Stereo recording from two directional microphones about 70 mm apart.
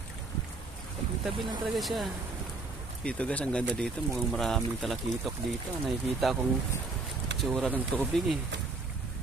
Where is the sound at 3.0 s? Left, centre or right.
Centre.